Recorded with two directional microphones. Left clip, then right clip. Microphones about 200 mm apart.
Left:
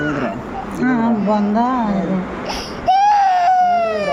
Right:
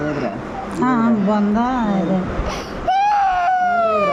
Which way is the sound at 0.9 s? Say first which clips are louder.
Left 1 dB; 20° right (ahead or behind).